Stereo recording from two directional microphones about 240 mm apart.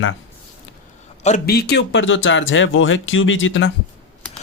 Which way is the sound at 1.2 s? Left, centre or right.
Left.